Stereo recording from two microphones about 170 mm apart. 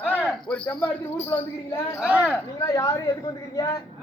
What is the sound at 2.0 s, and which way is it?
Speech, 5° right (ahead or behind).